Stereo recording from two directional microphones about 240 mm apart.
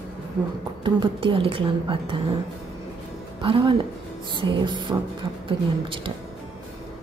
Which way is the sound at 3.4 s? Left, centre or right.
Right.